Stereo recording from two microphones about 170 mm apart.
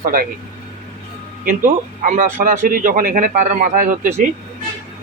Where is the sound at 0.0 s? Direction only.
55° right (ahead or behind).